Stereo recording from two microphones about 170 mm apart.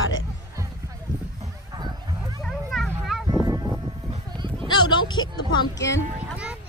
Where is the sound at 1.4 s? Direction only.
25° right (ahead or behind).